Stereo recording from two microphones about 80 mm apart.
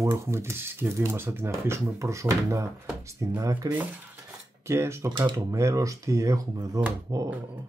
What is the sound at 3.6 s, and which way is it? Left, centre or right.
Speech, right.